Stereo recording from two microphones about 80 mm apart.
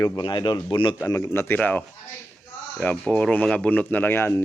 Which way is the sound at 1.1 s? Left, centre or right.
Left.